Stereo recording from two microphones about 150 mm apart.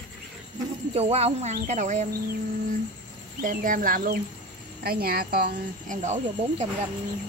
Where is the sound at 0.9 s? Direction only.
45° right (ahead or behind).